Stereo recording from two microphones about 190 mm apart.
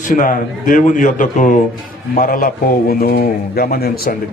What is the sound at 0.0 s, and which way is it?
A man's voice, 45° left (ahead or behind).